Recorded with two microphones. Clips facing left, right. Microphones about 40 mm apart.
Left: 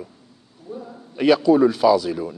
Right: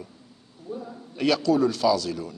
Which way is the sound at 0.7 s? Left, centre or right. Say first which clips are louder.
Left 1 dB; centre.